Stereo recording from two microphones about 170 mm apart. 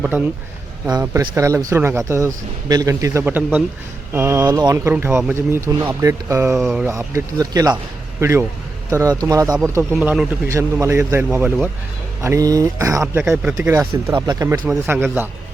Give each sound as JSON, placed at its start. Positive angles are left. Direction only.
{"t": 1.2, "sound": "speech", "side_deg": -20}
{"t": 6.6, "sound": "speech", "side_deg": 0}
{"t": 6.8, "sound": "speech", "side_deg": -15}
{"t": 9.9, "sound": "speech", "side_deg": -5}